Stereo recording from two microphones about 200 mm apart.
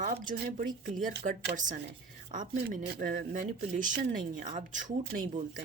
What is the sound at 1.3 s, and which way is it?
Speech, 40° right (ahead or behind).